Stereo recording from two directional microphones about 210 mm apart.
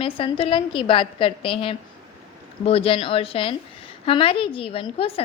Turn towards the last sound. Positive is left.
turn(degrees=25)  # may be behind; listen again after turning